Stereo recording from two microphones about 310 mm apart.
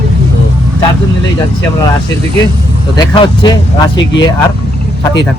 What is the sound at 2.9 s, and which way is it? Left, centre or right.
Speech, centre.